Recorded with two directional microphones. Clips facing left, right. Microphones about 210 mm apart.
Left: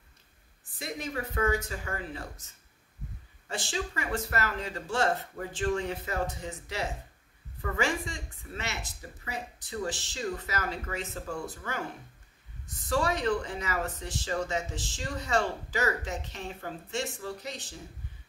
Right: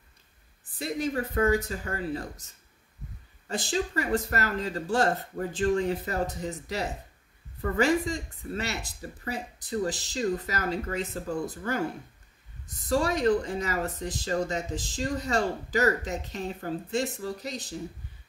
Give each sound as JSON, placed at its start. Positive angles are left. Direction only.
{"t": 0.7, "sound": "speech", "side_deg": -30}